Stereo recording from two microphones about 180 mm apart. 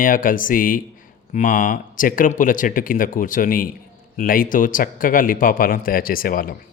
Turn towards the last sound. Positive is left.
turn(degrees=50)  # may be behind; listen again after turning